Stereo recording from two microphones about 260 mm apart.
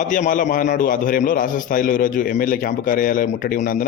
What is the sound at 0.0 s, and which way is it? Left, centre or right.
A man's voice, left.